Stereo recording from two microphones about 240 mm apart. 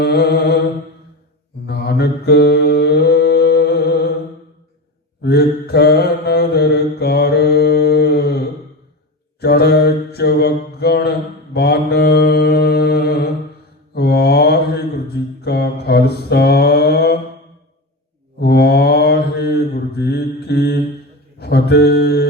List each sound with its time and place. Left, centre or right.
0.0 s mantra: left
1.6 s mantra: left
5.2 s mantra: left
18.3 s mantra: left
21.3 s a sound: left